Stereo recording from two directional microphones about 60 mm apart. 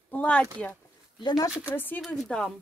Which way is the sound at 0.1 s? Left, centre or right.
Left.